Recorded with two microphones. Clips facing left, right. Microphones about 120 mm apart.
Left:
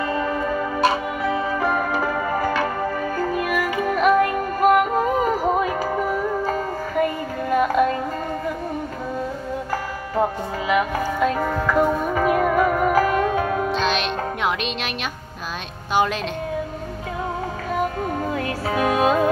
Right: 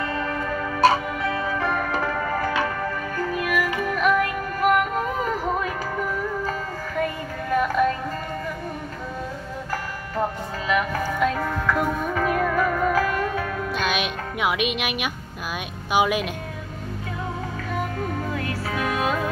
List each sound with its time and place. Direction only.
0.0 s music: 15° left (ahead or behind)
6.0 s music: 35° left (ahead or behind)
7.4 s music: 20° left (ahead or behind)
10.7 s music: 15° left (ahead or behind)
13.9 s music: 10° right (ahead or behind)
15.9 s speech: 10° right (ahead or behind)
17.7 s music: 25° left (ahead or behind)